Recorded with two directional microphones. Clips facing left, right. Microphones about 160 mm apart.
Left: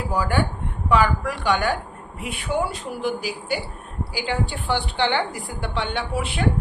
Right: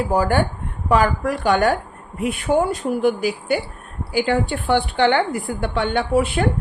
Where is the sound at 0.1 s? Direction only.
45° right (ahead or behind).